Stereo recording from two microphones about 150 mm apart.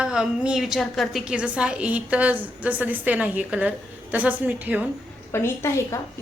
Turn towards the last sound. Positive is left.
turn(degrees=15)  # may be behind; listen again after turning